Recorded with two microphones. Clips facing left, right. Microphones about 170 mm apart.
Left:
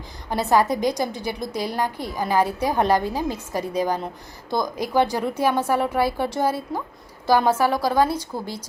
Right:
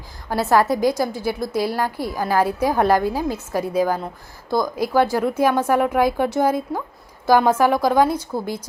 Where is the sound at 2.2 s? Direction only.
15° left (ahead or behind).